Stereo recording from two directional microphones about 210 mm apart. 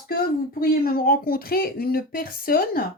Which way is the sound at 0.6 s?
45° left (ahead or behind).